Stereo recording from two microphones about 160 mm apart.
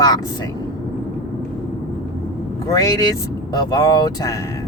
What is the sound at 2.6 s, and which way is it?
Speech, 20° left (ahead or behind).